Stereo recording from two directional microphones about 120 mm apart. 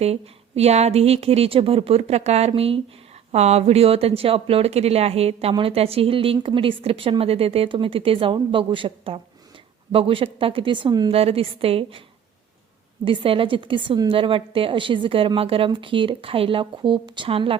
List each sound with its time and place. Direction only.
0.0 s speech: 60° right (ahead or behind)
2.5 s speech: 50° right (ahead or behind)
3.3 s speech: 65° right (ahead or behind); by 11.1 s 40° right (ahead or behind)
11.1 s speech: 55° right (ahead or behind)
13.1 s speech: 50° right (ahead or behind)